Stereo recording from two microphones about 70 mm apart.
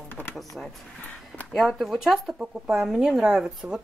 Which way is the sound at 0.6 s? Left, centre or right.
Centre.